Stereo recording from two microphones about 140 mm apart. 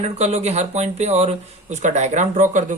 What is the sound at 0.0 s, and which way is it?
Speech, 55° right (ahead or behind).